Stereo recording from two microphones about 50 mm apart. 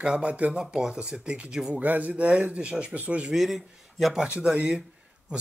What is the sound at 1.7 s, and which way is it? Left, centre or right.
Speech, right.